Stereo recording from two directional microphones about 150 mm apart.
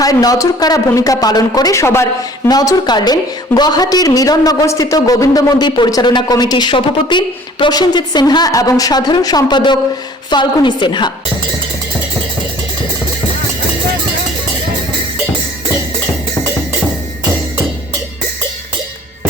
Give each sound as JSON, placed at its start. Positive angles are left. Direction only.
{"t": 0.0, "sound": "a woman's voice", "side_deg": 25}